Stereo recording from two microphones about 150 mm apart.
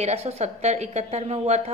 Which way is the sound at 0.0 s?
45° right (ahead or behind).